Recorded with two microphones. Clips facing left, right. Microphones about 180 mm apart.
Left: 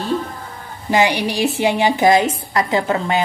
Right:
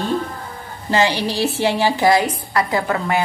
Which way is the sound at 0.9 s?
15° left (ahead or behind).